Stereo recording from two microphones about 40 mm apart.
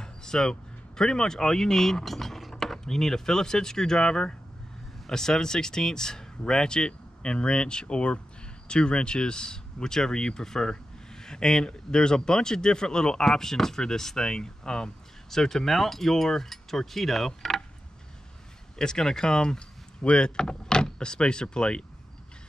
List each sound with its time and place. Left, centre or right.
0.0 s speech: centre
18.8 s speech: centre